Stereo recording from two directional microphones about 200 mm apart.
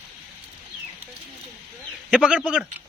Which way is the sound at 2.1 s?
5° right (ahead or behind).